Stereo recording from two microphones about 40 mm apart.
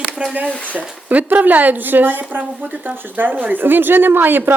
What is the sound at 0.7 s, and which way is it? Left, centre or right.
Speech, right.